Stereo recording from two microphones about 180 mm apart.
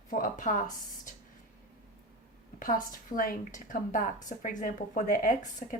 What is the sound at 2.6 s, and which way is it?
Speech, 50° left (ahead or behind).